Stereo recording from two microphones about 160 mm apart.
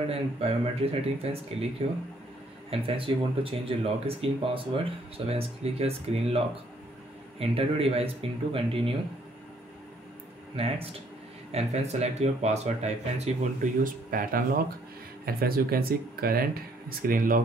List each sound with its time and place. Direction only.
0.1 s speech: 40° right (ahead or behind)
2.7 s speech: 35° right (ahead or behind)
10.5 s speech: 35° right (ahead or behind); by 17.4 s 60° right (ahead or behind)